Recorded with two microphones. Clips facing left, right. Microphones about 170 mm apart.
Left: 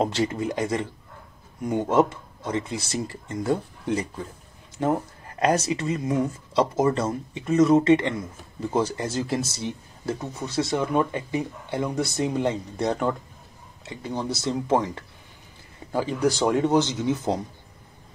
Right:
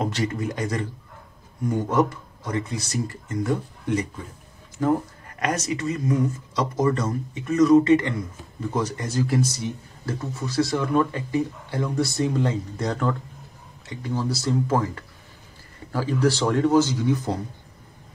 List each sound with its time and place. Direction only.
0.0 s speech: 25° left (ahead or behind)